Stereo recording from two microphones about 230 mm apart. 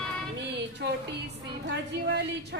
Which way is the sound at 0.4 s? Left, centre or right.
Right.